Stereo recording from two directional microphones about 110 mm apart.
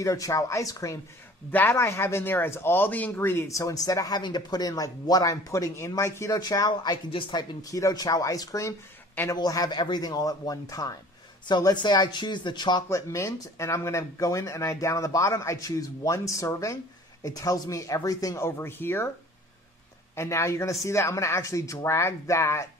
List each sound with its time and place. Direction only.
0.0 s speech: 30° left (ahead or behind)
1.5 s speech: 20° left (ahead or behind); by 7.4 s 50° left (ahead or behind)
7.6 s speech: 30° left (ahead or behind)
9.3 s speech: 35° left (ahead or behind)
20.2 s speech: 25° left (ahead or behind)